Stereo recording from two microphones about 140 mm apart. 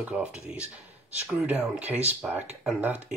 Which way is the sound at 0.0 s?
5° right (ahead or behind).